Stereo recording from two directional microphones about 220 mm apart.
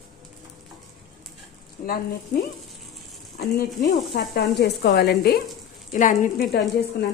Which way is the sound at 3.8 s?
40° left (ahead or behind).